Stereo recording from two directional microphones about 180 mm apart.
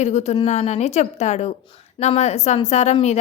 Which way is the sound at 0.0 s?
40° left (ahead or behind).